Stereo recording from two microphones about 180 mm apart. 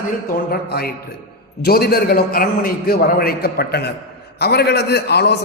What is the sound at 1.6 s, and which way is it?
A man's voice, 60° left (ahead or behind).